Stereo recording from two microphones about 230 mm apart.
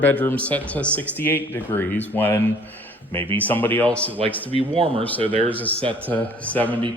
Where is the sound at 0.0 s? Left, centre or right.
Centre.